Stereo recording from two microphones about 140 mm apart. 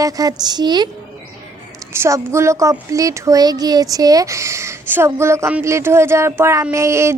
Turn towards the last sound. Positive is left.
turn(degrees=-20)  # may be behind; listen again after turning